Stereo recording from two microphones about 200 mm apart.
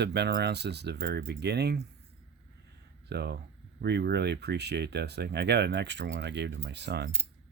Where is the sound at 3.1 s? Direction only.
55° right (ahead or behind).